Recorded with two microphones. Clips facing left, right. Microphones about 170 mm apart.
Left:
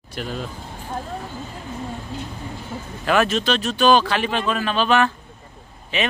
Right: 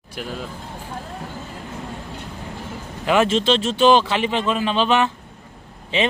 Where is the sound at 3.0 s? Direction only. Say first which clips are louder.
Right 2 dB; 20° right (ahead or behind).